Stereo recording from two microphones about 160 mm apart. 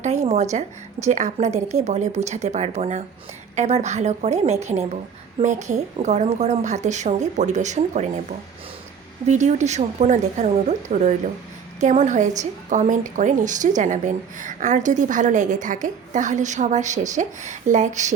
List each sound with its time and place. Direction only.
0.0 s a woman's voice: 45° right (ahead or behind)